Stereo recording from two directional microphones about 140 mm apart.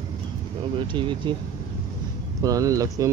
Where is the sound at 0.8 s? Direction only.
35° right (ahead or behind).